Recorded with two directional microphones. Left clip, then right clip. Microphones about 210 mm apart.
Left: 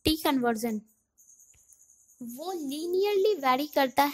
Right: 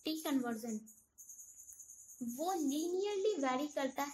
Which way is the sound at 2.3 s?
45° left (ahead or behind).